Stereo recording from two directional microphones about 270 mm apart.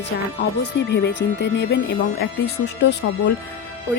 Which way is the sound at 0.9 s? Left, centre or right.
Left.